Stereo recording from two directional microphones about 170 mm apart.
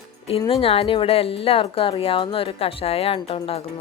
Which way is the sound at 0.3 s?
30° left (ahead or behind).